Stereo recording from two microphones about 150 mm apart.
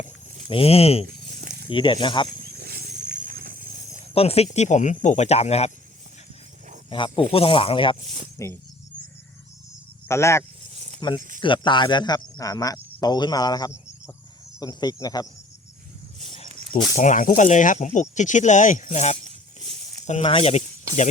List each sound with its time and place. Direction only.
0.4 s speech: 40° left (ahead or behind)
1.3 s a sound: 50° right (ahead or behind)
1.6 s speech: 35° left (ahead or behind)
2.4 s wild animals: 90° right; by 4.0 s 70° right (ahead or behind)
4.1 s speech: 40° left (ahead or behind)
6.9 s speech: 35° left (ahead or behind)
8.0 s speech: 40° right (ahead or behind)
10.1 s speech: 20° left (ahead or behind)
10.8 s snake: 50° right (ahead or behind)
11.3 s speech: 35° left (ahead or behind)
17.0 s speech: 60° left (ahead or behind)
19.5 s a sound: 50° right (ahead or behind)
20.2 s speech: 40° left (ahead or behind)